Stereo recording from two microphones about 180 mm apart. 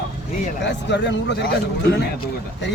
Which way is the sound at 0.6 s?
80° left.